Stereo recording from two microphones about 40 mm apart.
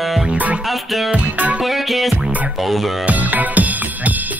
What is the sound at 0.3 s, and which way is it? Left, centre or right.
Music, right.